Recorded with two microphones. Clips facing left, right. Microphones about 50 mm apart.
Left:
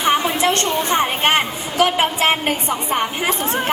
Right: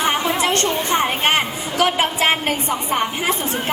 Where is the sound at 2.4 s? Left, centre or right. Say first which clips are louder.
Even; centre.